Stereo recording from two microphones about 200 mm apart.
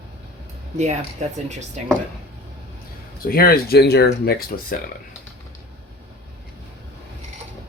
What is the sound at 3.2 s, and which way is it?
Speech, 50° left (ahead or behind).